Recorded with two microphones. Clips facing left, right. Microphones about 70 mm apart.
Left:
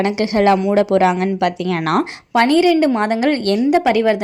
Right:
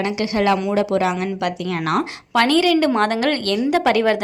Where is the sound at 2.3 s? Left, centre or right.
Left; by 4.1 s centre.